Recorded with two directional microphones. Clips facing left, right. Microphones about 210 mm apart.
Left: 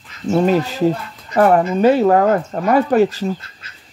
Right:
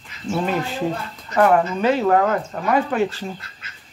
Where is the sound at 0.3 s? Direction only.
40° left (ahead or behind).